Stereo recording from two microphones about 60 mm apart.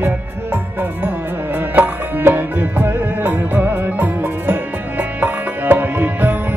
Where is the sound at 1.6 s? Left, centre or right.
Right.